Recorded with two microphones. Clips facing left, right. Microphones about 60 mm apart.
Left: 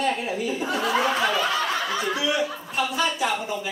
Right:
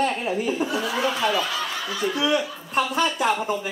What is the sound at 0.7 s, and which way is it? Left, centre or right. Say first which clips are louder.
Speech: left 2 dB; left.